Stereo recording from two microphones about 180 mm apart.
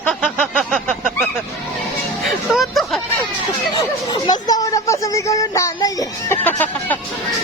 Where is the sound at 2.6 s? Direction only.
Centre (ahead or behind).